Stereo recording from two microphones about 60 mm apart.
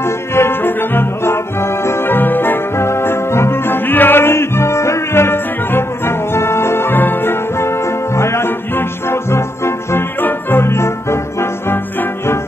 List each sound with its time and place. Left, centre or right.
0.3 s music: left
8.2 s music: left